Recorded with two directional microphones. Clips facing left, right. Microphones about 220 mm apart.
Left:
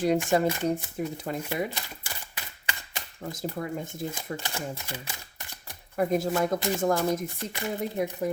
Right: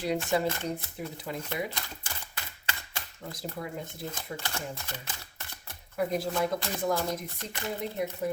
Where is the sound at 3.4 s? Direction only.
45° left (ahead or behind).